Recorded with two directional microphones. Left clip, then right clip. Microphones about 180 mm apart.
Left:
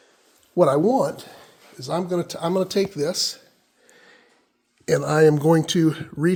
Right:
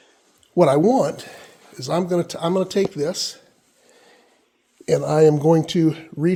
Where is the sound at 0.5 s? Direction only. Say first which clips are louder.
Right 2 dB; 20° right (ahead or behind).